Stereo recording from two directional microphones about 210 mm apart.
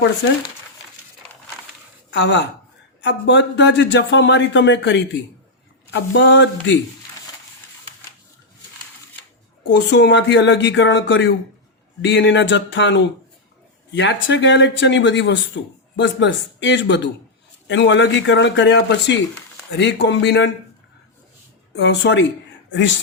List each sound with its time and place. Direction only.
2.0 s speech: 55° left (ahead or behind)
9.7 s speech: 55° left (ahead or behind)
21.8 s speech: 55° left (ahead or behind)